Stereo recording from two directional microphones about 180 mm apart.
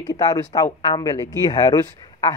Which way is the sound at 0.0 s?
20° left (ahead or behind).